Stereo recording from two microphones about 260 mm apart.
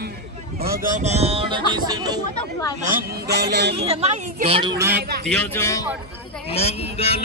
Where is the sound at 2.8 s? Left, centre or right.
Right.